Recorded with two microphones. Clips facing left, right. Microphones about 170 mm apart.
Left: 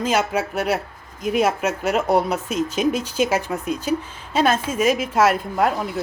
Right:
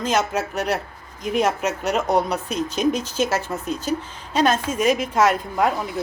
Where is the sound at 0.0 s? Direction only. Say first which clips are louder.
Left 1 dB; 10° left (ahead or behind).